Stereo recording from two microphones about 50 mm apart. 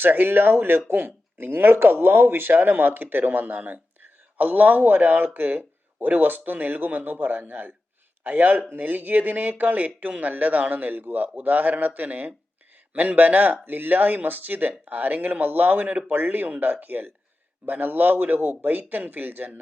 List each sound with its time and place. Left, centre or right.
0.0 s speech: right